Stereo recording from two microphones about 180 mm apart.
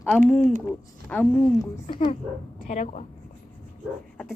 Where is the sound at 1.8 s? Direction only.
35° left (ahead or behind).